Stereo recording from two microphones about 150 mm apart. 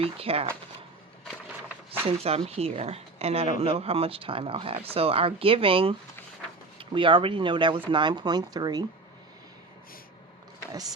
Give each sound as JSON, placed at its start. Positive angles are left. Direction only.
{"t": 0.0, "sound": "speech", "side_deg": -40}
{"t": 1.9, "sound": "speech", "side_deg": -40}